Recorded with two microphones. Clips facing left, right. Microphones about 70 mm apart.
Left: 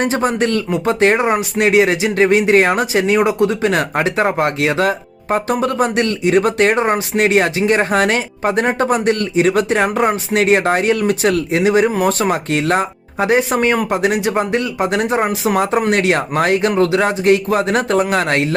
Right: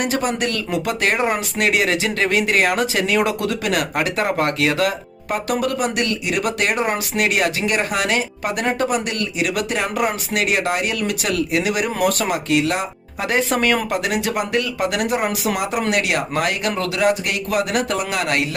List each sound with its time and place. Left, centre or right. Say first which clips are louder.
0.0 s speech: left 5 dB; left